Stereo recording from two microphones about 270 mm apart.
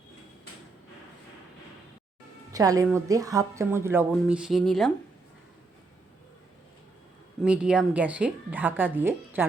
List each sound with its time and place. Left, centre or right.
2.5 s a woman's voice: centre
7.4 s a woman's voice: centre